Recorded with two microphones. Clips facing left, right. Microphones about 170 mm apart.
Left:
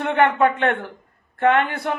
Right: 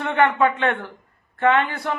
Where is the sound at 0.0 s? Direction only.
55° left (ahead or behind).